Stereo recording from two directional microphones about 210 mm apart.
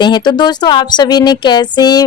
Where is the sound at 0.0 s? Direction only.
20° left (ahead or behind).